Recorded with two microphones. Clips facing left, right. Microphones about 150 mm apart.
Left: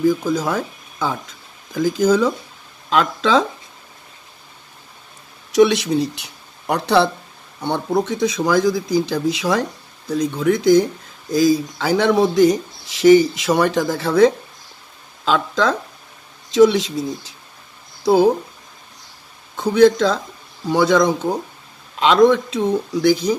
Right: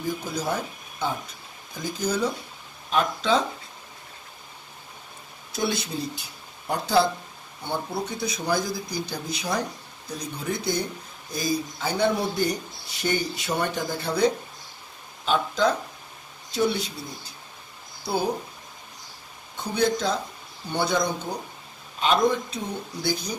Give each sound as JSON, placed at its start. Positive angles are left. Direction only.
{"t": 0.0, "sound": "speech", "side_deg": 90}
{"t": 5.5, "sound": "speech", "side_deg": 80}
{"t": 7.6, "sound": "speech", "side_deg": 85}
{"t": 19.5, "sound": "speech", "side_deg": 90}